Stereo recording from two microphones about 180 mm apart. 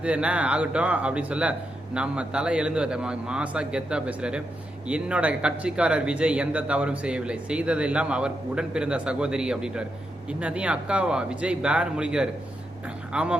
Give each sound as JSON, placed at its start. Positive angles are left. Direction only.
{"t": 0.0, "sound": "speech", "side_deg": -5}